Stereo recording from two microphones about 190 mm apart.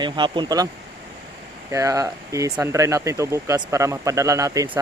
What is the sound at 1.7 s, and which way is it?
Speech, 15° right (ahead or behind).